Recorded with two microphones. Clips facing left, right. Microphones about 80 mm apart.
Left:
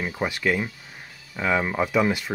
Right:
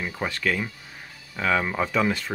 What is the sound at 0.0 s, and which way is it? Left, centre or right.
Speech, centre.